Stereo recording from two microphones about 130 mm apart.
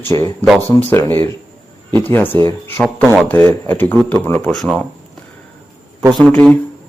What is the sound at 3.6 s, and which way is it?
Speech, 15° left (ahead or behind).